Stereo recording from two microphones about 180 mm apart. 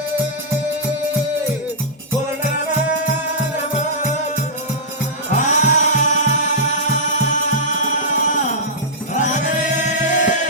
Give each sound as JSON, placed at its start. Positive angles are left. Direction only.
{"t": 5.4, "sound": "music", "side_deg": 40}